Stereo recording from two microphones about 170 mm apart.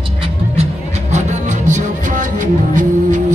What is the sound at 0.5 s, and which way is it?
Music, 40° right (ahead or behind).